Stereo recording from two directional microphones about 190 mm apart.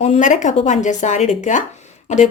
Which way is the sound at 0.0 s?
40° left (ahead or behind).